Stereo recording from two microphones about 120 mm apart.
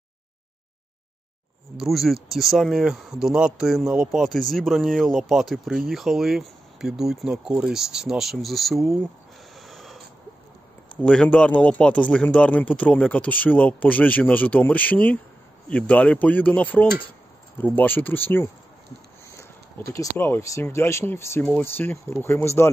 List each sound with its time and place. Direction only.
1.8 s speech: centre (ahead or behind)
9.6 s a sound: centre (ahead or behind)
11.0 s speech: 10° left (ahead or behind)
19.9 s speech: 25° left (ahead or behind)